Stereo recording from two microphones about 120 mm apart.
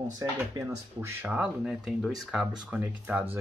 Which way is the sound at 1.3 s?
5° right (ahead or behind).